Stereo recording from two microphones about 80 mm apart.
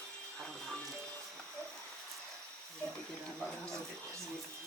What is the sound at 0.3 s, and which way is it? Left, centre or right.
Music, centre.